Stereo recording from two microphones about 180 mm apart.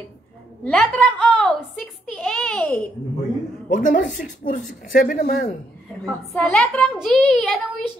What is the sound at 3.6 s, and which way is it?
Speech, 45° left (ahead or behind).